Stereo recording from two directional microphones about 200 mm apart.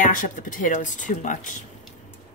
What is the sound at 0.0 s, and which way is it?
Speech, 40° left (ahead or behind).